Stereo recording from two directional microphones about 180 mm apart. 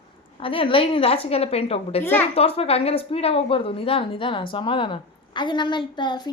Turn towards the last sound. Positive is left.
turn(degrees=25)  # may be behind; listen again after turning